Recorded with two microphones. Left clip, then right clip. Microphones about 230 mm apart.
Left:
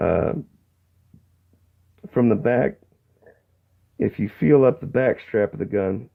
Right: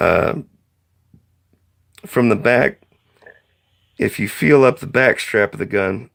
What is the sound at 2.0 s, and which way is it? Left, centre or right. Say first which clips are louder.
Speech: right 4 dB; right.